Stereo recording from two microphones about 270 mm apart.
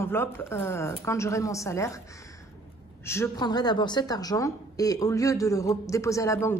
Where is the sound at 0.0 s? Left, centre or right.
Centre.